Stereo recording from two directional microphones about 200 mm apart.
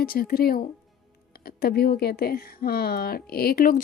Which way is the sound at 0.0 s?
45° left (ahead or behind).